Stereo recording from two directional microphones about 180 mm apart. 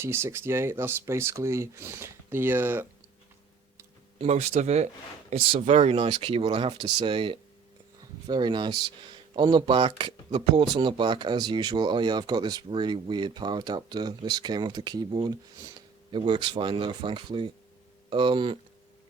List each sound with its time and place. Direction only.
0.0 s speech: 15° right (ahead or behind)
4.2 s speech: 40° right (ahead or behind)